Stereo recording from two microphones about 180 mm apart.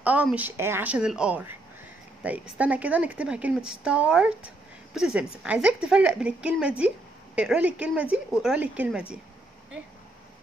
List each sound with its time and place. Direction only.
0.0 s a woman's voice: 10° right (ahead or behind)